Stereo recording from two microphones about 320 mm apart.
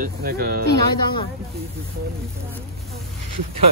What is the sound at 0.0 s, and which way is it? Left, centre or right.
Speech, right.